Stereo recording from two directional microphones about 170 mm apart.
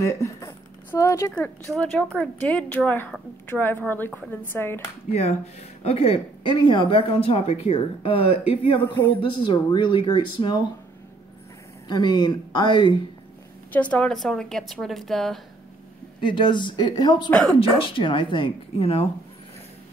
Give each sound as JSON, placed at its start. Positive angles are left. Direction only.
{"t": 0.0, "sound": "a sound", "side_deg": 15}
{"t": 1.3, "sound": "speech", "side_deg": 5}
{"t": 5.1, "sound": "speech", "side_deg": 40}
{"t": 11.9, "sound": "speech", "side_deg": 25}
{"t": 13.7, "sound": "a woman's voice", "side_deg": 10}
{"t": 16.2, "sound": "speech", "side_deg": 30}
{"t": 17.3, "sound": "a woman's voice", "side_deg": 5}
{"t": 17.6, "sound": "speech", "side_deg": 30}